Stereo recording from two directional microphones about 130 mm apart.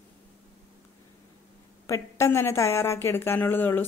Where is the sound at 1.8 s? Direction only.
20° left (ahead or behind).